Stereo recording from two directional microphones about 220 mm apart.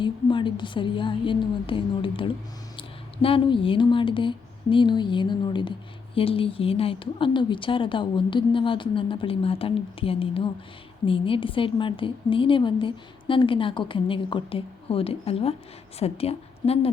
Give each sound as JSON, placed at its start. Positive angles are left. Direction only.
{"t": 0.0, "sound": "a woman's voice", "side_deg": 20}